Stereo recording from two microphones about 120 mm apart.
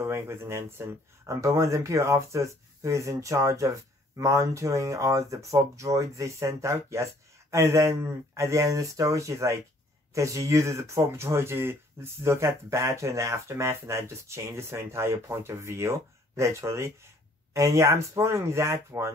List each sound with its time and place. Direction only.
0.0 s speech: 20° right (ahead or behind)